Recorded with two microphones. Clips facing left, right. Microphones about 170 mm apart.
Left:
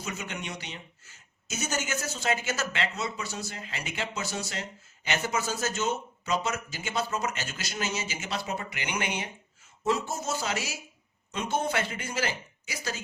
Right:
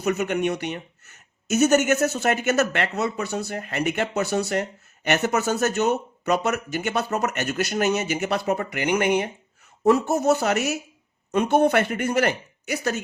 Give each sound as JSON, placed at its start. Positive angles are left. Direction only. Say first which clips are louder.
{"t": 0.0, "sound": "speech", "louder": "right 14 dB", "side_deg": -60}
{"t": 9.8, "sound": "speech", "louder": "right 11 dB", "side_deg": -65}